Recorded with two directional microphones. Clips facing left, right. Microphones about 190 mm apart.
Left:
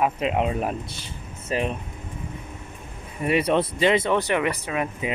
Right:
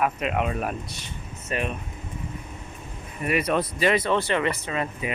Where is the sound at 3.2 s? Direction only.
25° left (ahead or behind).